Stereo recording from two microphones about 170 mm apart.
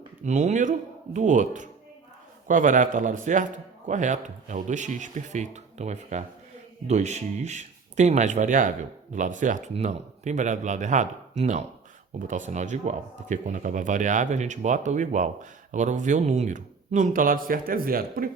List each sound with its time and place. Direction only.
0.3 s speech: 45° right (ahead or behind)